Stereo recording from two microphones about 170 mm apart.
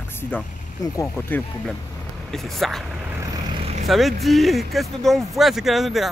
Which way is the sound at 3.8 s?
Centre (ahead or behind).